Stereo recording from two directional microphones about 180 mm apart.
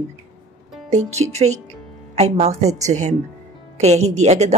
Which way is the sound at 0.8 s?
40° right (ahead or behind).